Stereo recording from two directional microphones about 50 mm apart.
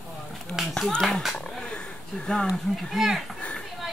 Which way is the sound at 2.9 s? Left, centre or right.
Centre.